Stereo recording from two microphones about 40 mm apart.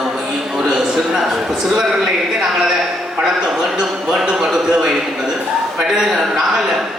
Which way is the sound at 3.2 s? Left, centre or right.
Centre.